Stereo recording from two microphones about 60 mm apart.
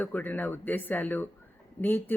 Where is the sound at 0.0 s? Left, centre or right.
Left.